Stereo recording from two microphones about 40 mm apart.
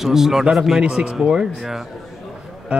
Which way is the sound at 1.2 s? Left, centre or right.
Centre.